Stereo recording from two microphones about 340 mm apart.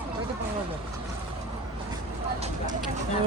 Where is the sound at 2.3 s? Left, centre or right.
Centre.